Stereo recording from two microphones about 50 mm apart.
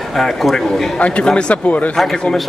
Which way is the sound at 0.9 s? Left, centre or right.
Left.